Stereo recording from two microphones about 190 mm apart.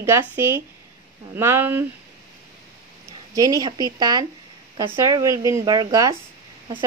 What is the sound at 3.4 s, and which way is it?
Speech, 20° right (ahead or behind).